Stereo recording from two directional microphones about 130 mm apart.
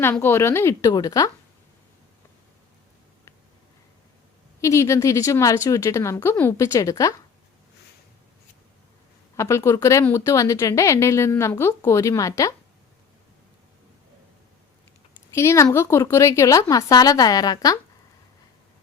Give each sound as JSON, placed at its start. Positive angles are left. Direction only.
{"t": 0.0, "sound": "a woman's voice", "side_deg": 15}
{"t": 4.6, "sound": "a woman's voice", "side_deg": 25}
{"t": 9.3, "sound": "a woman's voice", "side_deg": 20}
{"t": 15.4, "sound": "a woman's voice", "side_deg": 20}